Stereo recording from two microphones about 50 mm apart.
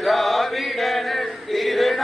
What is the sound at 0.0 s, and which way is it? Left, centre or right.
Chant, centre.